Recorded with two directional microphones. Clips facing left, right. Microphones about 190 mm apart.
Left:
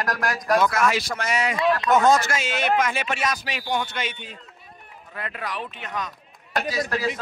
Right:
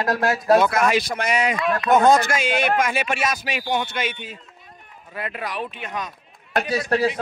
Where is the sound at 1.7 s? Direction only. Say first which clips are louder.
Right 4 dB; 55° right (ahead or behind).